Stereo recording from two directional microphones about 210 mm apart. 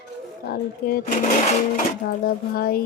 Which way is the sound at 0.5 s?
45° left (ahead or behind).